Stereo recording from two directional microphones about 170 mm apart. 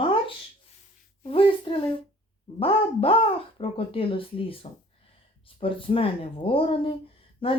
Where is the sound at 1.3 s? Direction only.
30° left (ahead or behind).